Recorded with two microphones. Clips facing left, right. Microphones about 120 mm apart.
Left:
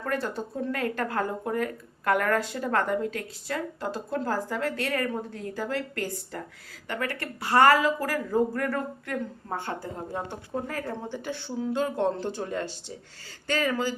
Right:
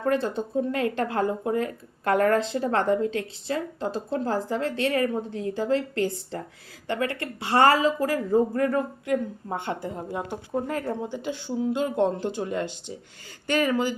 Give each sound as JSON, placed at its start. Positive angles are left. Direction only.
{"t": 0.0, "sound": "speech", "side_deg": -20}